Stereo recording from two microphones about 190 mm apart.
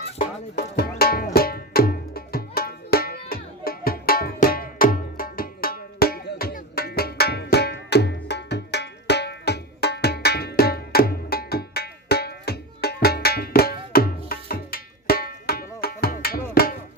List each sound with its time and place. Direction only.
0.5 s music: 55° left (ahead or behind)